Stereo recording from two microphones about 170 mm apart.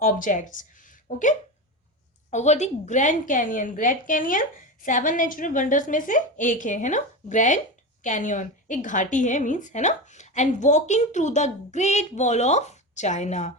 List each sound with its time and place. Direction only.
0.0 s a woman's voice: 55° left (ahead or behind)